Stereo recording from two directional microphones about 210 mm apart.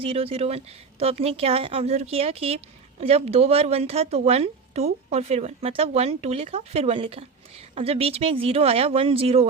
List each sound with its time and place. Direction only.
0.0 s speech: 25° right (ahead or behind)